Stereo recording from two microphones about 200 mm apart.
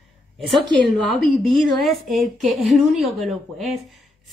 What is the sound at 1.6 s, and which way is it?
A woman's voice, centre (ahead or behind).